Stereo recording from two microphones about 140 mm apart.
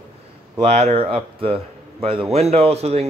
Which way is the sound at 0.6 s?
50° right (ahead or behind).